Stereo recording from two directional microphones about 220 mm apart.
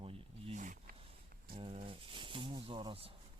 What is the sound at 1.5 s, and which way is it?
Speech, 25° right (ahead or behind).